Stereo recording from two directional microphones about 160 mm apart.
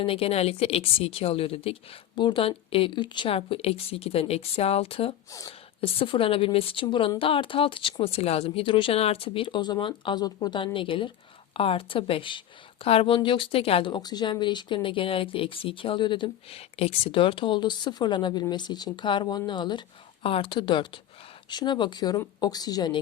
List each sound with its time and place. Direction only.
0.0 s a woman's voice: 35° left (ahead or behind)